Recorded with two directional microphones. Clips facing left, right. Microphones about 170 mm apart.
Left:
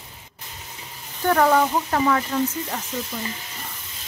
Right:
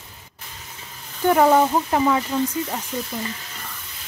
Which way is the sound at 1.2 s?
15° right (ahead or behind).